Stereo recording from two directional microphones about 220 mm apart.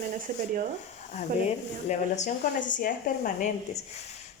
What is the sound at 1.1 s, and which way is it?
Speech, 30° left (ahead or behind).